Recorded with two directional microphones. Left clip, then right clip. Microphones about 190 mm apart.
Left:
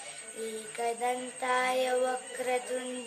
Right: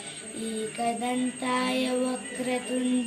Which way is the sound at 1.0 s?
10° left (ahead or behind).